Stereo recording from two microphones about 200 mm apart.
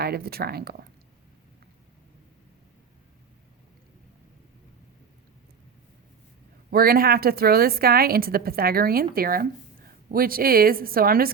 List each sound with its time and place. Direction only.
0.0 s a woman's voice: 50° right (ahead or behind)
6.7 s a woman's voice: 50° right (ahead or behind)